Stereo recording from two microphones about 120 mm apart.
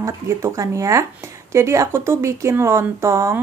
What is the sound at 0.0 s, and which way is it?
Speech, 25° right (ahead or behind).